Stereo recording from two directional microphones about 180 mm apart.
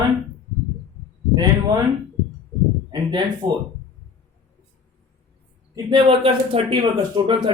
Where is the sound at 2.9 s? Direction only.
25° right (ahead or behind).